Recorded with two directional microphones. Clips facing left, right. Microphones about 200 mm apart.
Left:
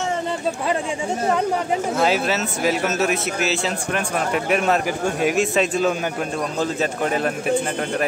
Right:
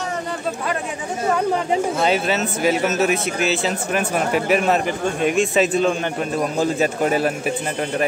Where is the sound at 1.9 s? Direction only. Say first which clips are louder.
Even; centre (ahead or behind).